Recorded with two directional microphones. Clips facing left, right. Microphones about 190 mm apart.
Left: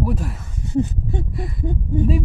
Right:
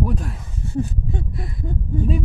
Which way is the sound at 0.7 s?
20° left (ahead or behind).